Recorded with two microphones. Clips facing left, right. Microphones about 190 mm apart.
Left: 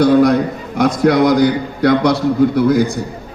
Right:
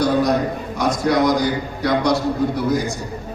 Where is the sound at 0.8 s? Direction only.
60° left (ahead or behind).